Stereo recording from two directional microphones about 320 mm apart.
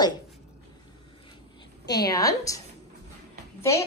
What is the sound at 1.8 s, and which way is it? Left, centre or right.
Speech, centre.